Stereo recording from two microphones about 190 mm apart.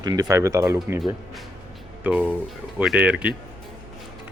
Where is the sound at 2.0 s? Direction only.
10° right (ahead or behind).